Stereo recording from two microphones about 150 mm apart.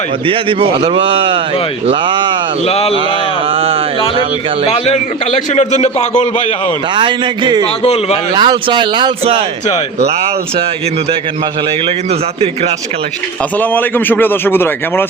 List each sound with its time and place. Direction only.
0.3 s speech: 35° right (ahead or behind)
2.6 s speech: 40° left (ahead or behind)
3.5 s speech: 40° right (ahead or behind)
5.5 s speech: 50° left (ahead or behind)
6.9 s speech: 30° right (ahead or behind)
13.6 s a man's voice: 10° left (ahead or behind)